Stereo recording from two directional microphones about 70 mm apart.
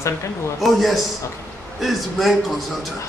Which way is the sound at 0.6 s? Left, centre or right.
Centre.